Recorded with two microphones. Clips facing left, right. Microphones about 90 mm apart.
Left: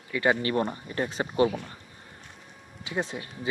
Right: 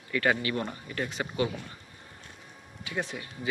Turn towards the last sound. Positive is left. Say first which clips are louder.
# left 3 dB
turn(degrees=25)  # may be behind; listen again after turning